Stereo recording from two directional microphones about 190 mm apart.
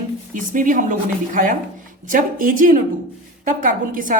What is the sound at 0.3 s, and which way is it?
A woman's voice, 45° right (ahead or behind).